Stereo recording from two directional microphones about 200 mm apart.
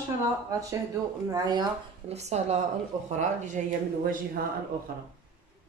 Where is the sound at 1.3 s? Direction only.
20° right (ahead or behind).